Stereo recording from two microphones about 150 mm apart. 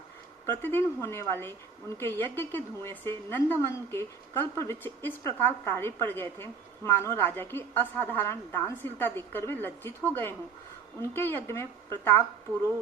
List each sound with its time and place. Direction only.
0.4 s a woman's voice: 15° left (ahead or behind)